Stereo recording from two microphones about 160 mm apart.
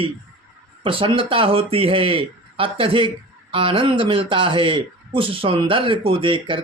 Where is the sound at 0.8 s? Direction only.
30° right (ahead or behind).